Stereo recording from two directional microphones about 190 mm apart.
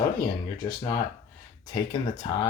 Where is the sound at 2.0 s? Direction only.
20° left (ahead or behind).